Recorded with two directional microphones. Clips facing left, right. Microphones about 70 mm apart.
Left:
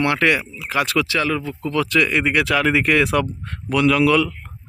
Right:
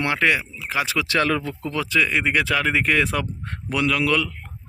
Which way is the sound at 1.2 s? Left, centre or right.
Right.